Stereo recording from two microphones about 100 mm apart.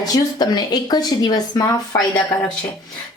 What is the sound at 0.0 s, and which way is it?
Speech, 40° left (ahead or behind).